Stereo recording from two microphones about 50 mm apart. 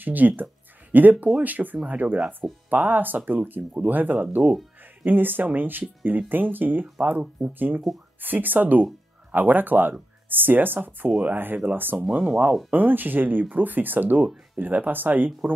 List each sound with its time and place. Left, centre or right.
0.0 s speech: right
4.4 s speech: centre
5.0 s speech: right
12.0 s speech: right
12.4 s speech: centre
12.7 s speech: right
14.2 s speech: centre
14.6 s speech: right